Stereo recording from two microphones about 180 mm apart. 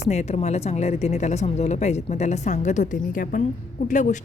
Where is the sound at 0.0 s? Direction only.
40° left (ahead or behind).